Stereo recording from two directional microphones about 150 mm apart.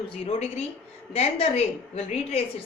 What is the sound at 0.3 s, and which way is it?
A woman's voice, 45° left (ahead or behind).